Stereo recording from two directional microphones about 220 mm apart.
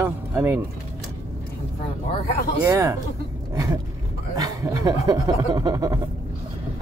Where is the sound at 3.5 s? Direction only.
15° right (ahead or behind).